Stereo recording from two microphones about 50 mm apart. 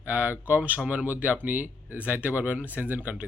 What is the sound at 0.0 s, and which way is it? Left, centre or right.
Speech, right.